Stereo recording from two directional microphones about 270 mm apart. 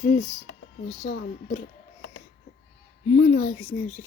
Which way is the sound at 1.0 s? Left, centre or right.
Left.